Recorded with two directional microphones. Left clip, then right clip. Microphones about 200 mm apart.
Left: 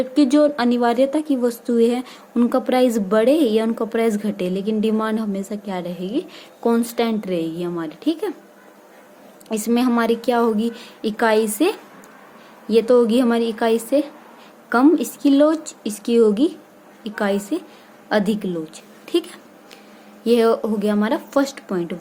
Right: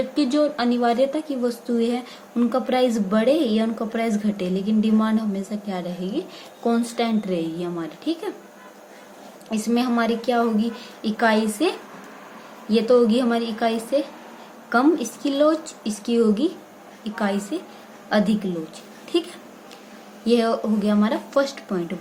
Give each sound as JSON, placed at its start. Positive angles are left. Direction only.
{"t": 0.1, "sound": "a woman's voice", "side_deg": 50}
{"t": 9.5, "sound": "a woman's voice", "side_deg": 50}
{"t": 19.0, "sound": "a sound", "side_deg": 50}
{"t": 20.2, "sound": "a woman's voice", "side_deg": 45}